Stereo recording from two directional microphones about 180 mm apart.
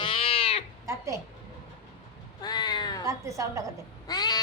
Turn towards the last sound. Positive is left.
turn(degrees=20)  # may be behind; listen again after turning